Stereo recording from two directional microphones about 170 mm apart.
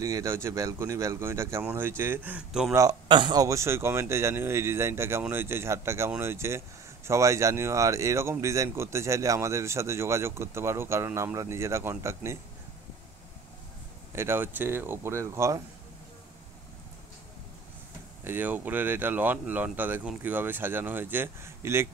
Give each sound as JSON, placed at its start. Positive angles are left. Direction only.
{"t": 0.0, "sound": "speech", "side_deg": -20}
{"t": 2.7, "sound": "speech", "side_deg": -20}
{"t": 14.1, "sound": "speech", "side_deg": -15}
{"t": 18.2, "sound": "speech", "side_deg": -10}